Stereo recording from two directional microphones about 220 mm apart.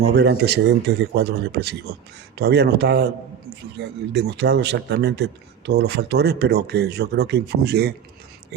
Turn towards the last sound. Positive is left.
turn(degrees=-45)  # may be behind; listen again after turning